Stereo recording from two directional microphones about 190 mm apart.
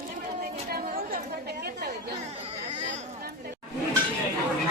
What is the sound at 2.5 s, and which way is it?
Chatter, 35° right (ahead or behind).